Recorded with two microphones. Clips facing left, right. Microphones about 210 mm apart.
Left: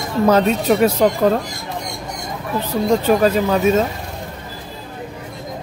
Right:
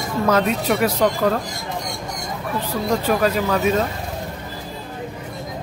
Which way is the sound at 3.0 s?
25° left (ahead or behind).